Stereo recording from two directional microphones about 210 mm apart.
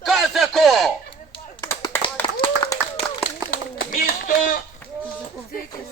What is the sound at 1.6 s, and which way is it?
Clapping, 15° left (ahead or behind).